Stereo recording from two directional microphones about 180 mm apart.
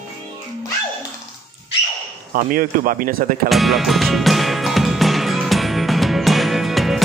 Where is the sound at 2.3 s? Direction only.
50° right (ahead or behind).